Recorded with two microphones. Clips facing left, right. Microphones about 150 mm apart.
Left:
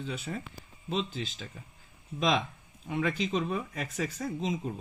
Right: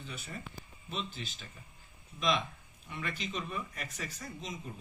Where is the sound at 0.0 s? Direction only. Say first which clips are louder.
Left 8 dB; 90° left.